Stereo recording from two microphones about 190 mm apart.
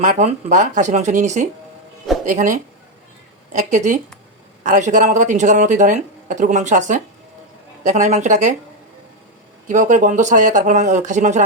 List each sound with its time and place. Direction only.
0.0 s speech: 40° right (ahead or behind)
9.6 s speech: 40° right (ahead or behind)